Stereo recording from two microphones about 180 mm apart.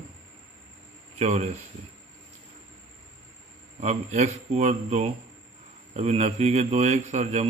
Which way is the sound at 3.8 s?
35° right (ahead or behind).